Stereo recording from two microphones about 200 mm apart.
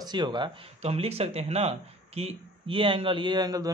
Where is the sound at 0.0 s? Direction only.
20° right (ahead or behind).